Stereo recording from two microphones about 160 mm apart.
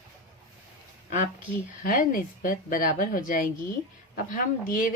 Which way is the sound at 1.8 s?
55° left (ahead or behind).